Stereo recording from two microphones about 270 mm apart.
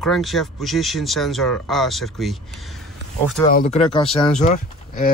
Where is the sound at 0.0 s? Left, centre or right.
Centre.